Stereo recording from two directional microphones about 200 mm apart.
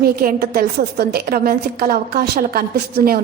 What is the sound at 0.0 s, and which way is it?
A woman's voice, 50° right (ahead or behind).